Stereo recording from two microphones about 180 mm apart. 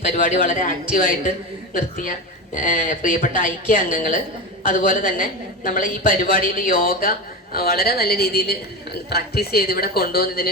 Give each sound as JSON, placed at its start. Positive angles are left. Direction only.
{"t": 0.1, "sound": "a woman's voice", "side_deg": 45}